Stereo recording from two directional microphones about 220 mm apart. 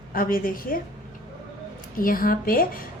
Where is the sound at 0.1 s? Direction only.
40° left (ahead or behind).